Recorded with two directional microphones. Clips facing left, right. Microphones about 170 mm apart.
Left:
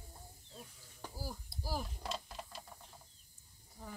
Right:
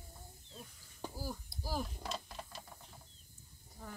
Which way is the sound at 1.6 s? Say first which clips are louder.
Right 1 dB; 5° left (ahead or behind).